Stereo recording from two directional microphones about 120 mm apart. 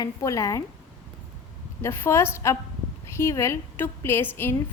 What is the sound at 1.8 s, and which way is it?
A woman's voice, 20° left (ahead or behind).